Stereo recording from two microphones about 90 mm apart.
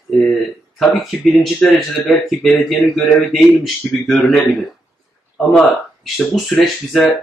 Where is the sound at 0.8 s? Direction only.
Centre (ahead or behind).